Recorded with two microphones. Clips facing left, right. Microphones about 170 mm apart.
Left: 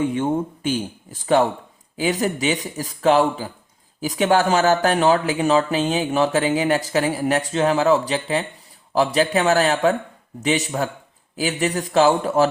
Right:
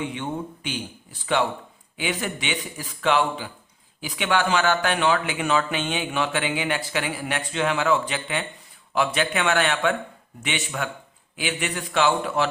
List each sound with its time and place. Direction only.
0.0 s speech: 45° left (ahead or behind)